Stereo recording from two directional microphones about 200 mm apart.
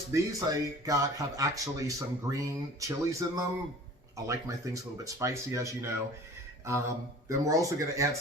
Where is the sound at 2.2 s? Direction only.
15° right (ahead or behind).